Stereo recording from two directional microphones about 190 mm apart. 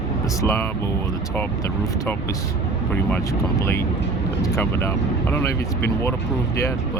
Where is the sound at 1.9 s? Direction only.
15° left (ahead or behind).